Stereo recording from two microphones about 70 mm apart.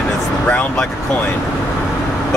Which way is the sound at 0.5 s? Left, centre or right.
Centre.